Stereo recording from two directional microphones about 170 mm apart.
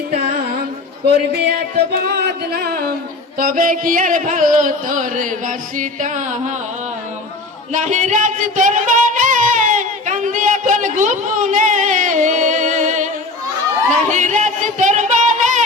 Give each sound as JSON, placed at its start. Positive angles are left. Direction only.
{"t": 1.1, "sound": "music", "side_deg": -65}
{"t": 3.3, "sound": "music", "side_deg": -55}
{"t": 7.7, "sound": "music", "side_deg": -45}
{"t": 14.1, "sound": "music", "side_deg": -45}